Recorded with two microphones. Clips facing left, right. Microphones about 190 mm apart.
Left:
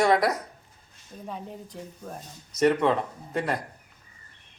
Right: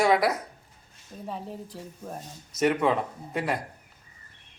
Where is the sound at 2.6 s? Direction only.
5° right (ahead or behind).